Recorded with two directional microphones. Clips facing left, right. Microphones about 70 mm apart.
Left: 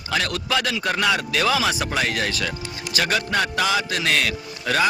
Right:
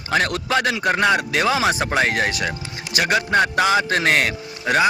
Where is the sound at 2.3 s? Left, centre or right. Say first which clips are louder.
Right 2 dB; right.